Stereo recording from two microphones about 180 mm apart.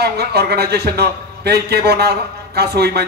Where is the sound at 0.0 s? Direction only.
65° right (ahead or behind).